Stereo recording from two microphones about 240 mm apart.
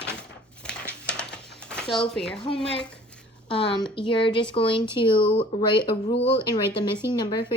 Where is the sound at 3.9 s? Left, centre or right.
Left.